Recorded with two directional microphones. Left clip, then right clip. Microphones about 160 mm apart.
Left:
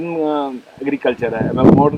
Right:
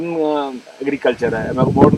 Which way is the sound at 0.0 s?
15° left (ahead or behind).